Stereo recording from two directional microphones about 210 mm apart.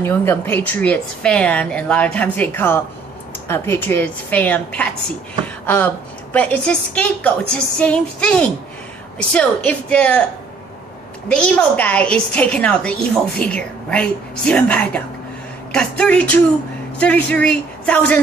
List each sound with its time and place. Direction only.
0.0 s a woman's voice: 10° left (ahead or behind)
5.4 s a sound: 5° left (ahead or behind)
6.3 s a woman's voice: 5° left (ahead or behind)
11.2 s a woman's voice: 5° left (ahead or behind)